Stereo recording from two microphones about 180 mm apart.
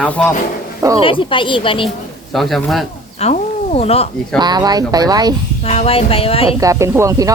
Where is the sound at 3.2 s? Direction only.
35° left (ahead or behind).